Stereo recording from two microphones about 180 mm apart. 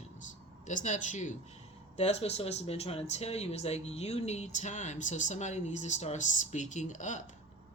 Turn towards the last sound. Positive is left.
turn(degrees=45)  # may be behind; listen again after turning